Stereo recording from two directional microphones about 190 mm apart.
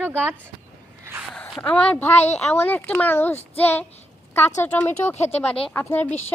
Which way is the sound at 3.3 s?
35° left (ahead or behind).